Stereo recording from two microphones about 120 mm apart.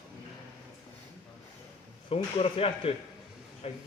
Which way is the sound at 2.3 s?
55° left (ahead or behind).